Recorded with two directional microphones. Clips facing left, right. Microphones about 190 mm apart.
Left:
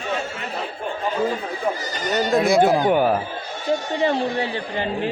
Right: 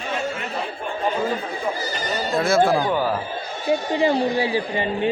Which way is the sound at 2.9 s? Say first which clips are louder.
Left 4 dB; 55° left (ahead or behind).